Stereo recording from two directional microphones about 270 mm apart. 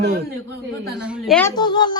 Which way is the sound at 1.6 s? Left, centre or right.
Centre.